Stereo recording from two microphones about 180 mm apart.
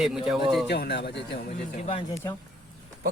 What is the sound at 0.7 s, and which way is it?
Speech, 65° left (ahead or behind).